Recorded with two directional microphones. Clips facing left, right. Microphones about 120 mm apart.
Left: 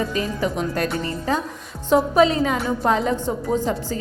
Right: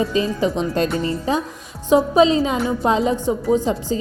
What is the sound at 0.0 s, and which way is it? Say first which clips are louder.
A woman's voice: right 4 dB; 25° right (ahead or behind).